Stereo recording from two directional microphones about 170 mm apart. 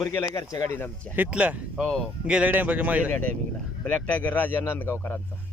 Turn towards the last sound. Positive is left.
turn(degrees=15)  # may be behind; listen again after turning